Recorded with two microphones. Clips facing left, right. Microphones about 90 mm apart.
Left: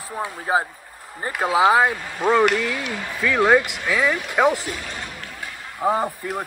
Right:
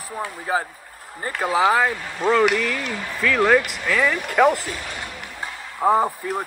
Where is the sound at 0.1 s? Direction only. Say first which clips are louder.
Left 2 dB; 15° left (ahead or behind).